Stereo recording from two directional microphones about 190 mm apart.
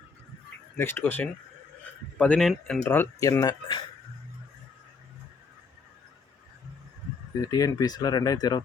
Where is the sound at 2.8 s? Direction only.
15° left (ahead or behind).